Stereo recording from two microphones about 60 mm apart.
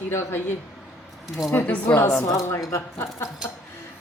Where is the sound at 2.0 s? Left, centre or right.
Left.